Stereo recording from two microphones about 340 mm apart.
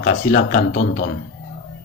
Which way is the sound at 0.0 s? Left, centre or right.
Left.